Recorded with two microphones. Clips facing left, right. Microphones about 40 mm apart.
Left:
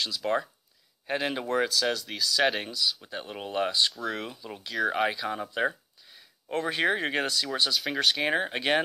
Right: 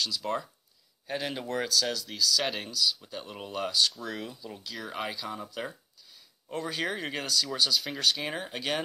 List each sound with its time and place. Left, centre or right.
0.0 s speech: left
8.3 s speech: left